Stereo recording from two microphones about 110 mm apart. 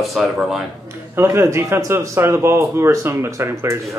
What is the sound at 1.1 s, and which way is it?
A man's voice, 25° right (ahead or behind).